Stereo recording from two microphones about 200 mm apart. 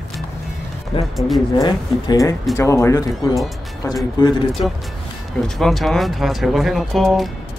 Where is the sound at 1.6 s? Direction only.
20° left (ahead or behind).